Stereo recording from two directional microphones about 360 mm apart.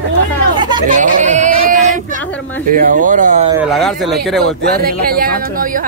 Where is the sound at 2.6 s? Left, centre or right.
Right.